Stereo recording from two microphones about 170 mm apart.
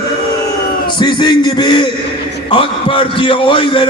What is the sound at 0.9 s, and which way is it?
A man's voice, 25° left (ahead or behind).